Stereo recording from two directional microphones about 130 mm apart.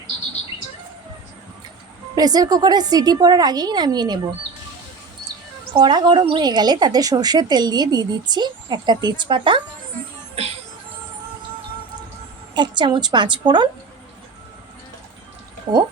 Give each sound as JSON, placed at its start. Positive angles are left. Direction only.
{"t": 2.1, "sound": "speech", "side_deg": -30}
{"t": 5.7, "sound": "speech", "side_deg": -35}
{"t": 12.5, "sound": "speech", "side_deg": -35}
{"t": 15.7, "sound": "speech", "side_deg": -40}